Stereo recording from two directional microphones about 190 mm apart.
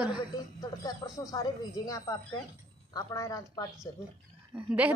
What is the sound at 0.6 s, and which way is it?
A woman's voice, 20° left (ahead or behind).